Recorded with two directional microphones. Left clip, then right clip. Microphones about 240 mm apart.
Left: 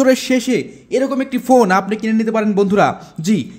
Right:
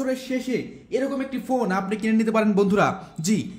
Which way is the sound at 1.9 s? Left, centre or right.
Centre.